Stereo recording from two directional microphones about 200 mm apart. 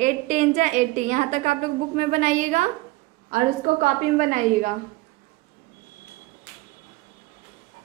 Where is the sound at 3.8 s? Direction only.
40° right (ahead or behind).